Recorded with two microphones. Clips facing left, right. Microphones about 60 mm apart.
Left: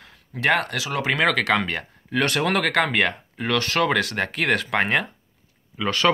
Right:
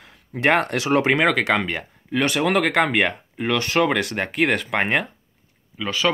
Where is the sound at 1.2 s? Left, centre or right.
Centre.